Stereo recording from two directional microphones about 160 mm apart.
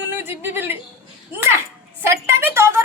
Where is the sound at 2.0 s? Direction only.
15° right (ahead or behind).